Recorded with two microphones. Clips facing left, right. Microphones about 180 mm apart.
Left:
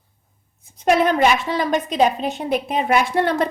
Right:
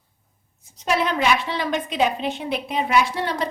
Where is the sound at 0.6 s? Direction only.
55° left (ahead or behind).